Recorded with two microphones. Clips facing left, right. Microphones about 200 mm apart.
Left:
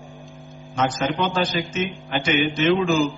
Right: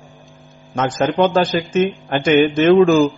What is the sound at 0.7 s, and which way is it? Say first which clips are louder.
A man's voice: right 6 dB; 50° right (ahead or behind).